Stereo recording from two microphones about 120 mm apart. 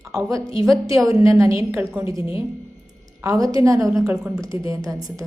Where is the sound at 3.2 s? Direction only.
30° right (ahead or behind).